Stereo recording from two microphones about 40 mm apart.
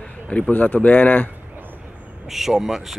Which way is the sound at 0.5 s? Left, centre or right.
Left.